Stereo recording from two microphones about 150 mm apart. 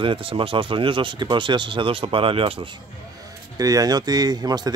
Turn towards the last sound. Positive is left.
turn(degrees=-25)  # may be behind; listen again after turning